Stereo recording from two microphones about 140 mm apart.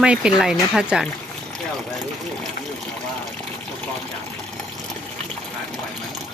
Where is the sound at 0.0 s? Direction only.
5° right (ahead or behind).